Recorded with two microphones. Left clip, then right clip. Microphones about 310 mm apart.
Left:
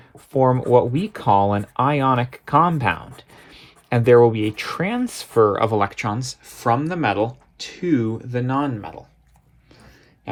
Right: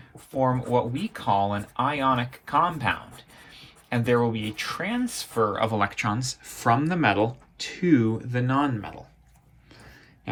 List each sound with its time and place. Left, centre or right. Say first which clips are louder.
0.3 s speech: left 8 dB; left